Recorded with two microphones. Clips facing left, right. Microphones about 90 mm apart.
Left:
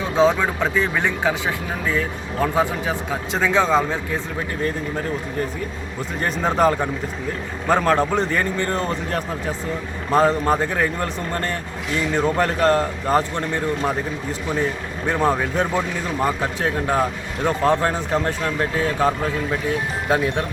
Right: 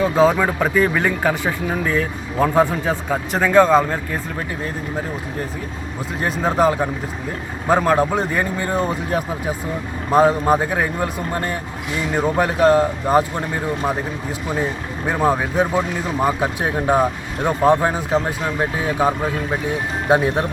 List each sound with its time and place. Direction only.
0.0 s speech: 5° right (ahead or behind)
6.1 s speech: 5° right (ahead or behind)
20.1 s speech: 25° right (ahead or behind)